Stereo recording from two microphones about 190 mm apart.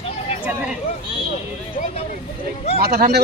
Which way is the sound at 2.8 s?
55° right (ahead or behind).